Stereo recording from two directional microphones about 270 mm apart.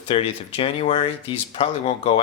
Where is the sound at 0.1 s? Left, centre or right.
Left.